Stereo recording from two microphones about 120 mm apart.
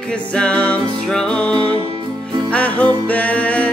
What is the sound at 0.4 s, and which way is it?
Music, 10° left (ahead or behind).